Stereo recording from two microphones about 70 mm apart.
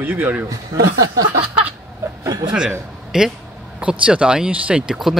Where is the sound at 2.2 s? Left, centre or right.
Right.